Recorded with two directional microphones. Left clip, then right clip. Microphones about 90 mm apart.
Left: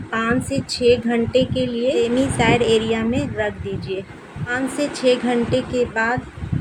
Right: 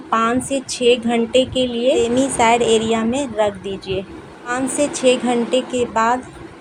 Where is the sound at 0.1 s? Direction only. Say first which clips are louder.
Right 4 dB; 50° right (ahead or behind).